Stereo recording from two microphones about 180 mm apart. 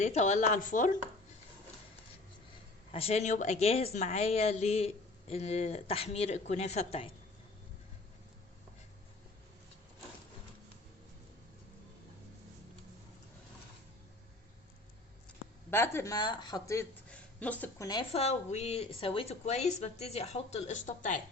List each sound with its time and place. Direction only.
0.0 s a woman's voice: 40° left (ahead or behind)
2.9 s a woman's voice: 35° left (ahead or behind)
15.7 s a woman's voice: 15° left (ahead or behind)
17.1 s a woman's voice: 10° left (ahead or behind)
18.1 s a woman's voice: 35° left (ahead or behind)